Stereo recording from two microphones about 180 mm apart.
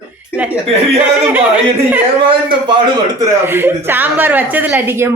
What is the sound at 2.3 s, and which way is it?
Speech, 25° right (ahead or behind).